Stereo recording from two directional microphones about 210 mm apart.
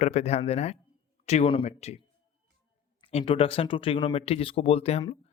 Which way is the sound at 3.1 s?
25° left (ahead or behind).